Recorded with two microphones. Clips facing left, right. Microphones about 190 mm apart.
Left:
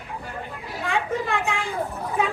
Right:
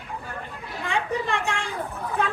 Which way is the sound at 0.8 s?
5° left (ahead or behind).